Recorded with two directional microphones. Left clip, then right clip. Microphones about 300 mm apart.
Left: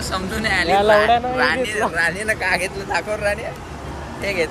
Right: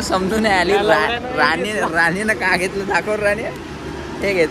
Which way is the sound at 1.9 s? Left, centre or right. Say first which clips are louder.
Right 3 dB; centre.